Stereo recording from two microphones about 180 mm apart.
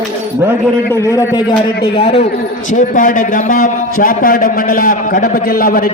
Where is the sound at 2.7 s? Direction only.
50° left (ahead or behind).